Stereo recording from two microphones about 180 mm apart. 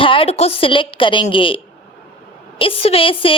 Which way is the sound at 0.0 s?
30° left (ahead or behind).